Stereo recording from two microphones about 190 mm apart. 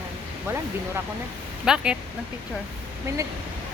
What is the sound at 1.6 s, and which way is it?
Speech, 5° right (ahead or behind).